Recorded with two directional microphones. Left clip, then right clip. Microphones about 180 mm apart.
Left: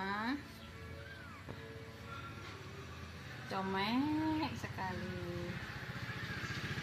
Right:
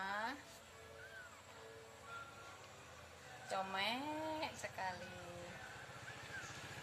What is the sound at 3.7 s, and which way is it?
Speech, 25° right (ahead or behind).